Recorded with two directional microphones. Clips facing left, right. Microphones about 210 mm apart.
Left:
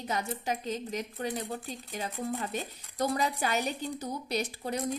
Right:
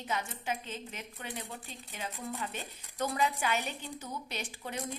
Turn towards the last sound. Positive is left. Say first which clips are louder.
# left 7 dB
turn(degrees=40)  # may be behind; listen again after turning